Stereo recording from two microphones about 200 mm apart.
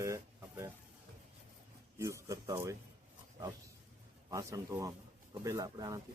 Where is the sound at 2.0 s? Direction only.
15° right (ahead or behind).